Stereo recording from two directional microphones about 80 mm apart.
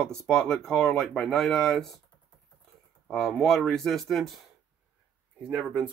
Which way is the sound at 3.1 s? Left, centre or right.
Centre.